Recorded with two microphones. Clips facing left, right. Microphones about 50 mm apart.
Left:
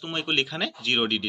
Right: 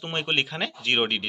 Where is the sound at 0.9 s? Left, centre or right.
Centre.